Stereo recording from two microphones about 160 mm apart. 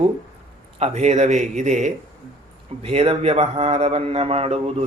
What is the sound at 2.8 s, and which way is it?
A man's voice, 35° right (ahead or behind).